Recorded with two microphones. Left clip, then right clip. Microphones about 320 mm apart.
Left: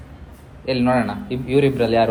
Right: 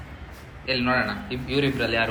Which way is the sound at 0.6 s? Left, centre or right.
Centre.